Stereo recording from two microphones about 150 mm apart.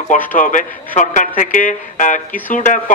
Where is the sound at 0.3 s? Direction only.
60° left (ahead or behind).